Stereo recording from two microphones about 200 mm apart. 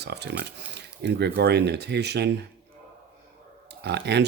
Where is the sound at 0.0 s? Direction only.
55° right (ahead or behind).